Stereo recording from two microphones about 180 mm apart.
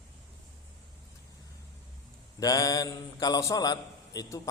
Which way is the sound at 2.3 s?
20° left (ahead or behind).